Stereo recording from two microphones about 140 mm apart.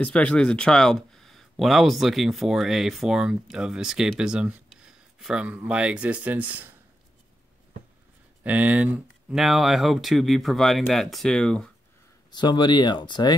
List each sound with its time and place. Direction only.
0.0 s speech: 10° left (ahead or behind); by 6.7 s 10° right (ahead or behind)
8.5 s speech: 10° right (ahead or behind); by 11.7 s 5° left (ahead or behind)
12.3 s speech: 30° left (ahead or behind)